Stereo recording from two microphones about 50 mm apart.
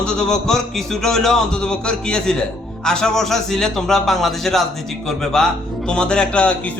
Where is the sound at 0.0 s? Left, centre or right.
Centre.